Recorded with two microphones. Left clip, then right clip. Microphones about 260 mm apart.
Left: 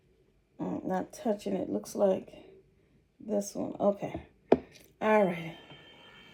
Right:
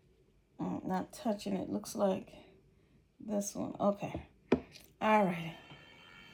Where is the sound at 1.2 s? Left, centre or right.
Right.